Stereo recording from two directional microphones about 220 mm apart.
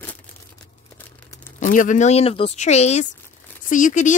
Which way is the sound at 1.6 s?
35° left (ahead or behind).